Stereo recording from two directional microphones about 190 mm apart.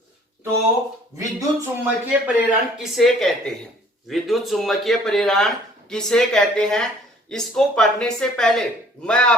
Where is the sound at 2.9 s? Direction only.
Centre (ahead or behind).